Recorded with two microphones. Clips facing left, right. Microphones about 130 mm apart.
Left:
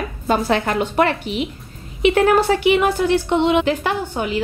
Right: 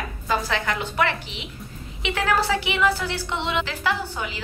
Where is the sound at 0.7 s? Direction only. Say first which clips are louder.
Left 7 dB; 55° left (ahead or behind).